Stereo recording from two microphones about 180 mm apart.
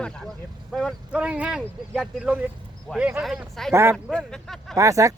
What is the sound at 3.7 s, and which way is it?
Speech, 15° right (ahead or behind).